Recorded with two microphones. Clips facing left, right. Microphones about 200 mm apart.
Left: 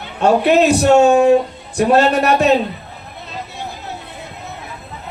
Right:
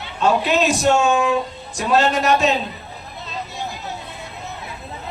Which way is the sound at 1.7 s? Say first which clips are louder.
Left 5 dB; 60° left (ahead or behind).